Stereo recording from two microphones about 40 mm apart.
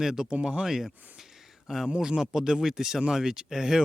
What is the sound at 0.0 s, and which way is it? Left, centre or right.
Speech, centre.